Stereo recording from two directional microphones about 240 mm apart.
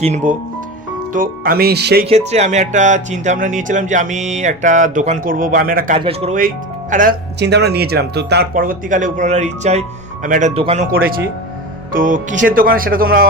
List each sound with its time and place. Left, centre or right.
0.0 s speech: right
2.0 s speech: right
6.0 s speech: right
11.9 s speech: right